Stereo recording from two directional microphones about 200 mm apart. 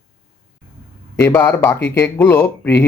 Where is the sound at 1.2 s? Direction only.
10° left (ahead or behind).